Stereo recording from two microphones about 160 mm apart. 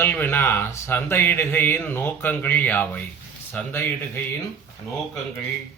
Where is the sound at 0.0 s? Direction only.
15° left (ahead or behind).